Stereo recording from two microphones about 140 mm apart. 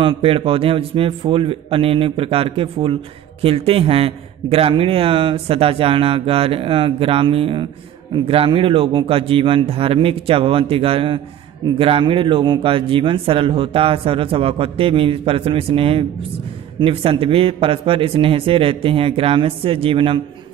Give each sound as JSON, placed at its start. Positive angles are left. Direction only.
{"t": 0.0, "sound": "speech", "side_deg": -40}